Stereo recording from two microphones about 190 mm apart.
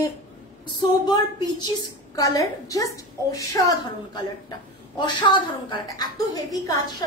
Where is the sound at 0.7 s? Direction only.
20° left (ahead or behind).